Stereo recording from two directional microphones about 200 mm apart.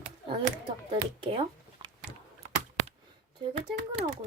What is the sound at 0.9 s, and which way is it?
Speech, 25° right (ahead or behind).